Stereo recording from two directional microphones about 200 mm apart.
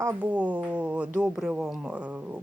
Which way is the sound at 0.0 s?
10° right (ahead or behind).